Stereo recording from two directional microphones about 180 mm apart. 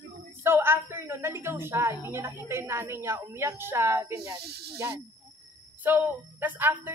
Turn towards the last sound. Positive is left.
turn(degrees=-10)  # may be behind; listen again after turning